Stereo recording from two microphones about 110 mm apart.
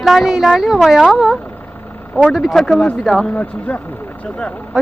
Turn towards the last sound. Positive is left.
turn(degrees=10)  # may be behind; listen again after turning